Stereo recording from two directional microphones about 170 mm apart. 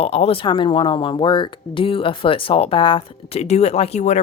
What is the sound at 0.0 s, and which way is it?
Speech, 35° left (ahead or behind).